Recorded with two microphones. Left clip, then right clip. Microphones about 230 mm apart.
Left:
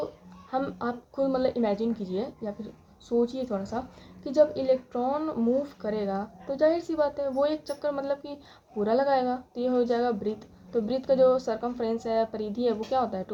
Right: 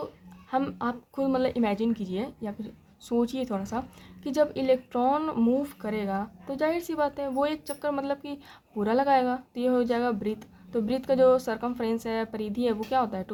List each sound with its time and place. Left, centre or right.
0.5 s a woman's voice: right